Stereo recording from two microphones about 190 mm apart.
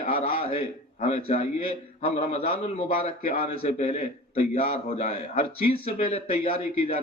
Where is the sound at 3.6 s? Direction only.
35° left (ahead or behind).